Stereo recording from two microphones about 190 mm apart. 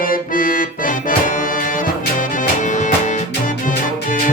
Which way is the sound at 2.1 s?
40° left (ahead or behind).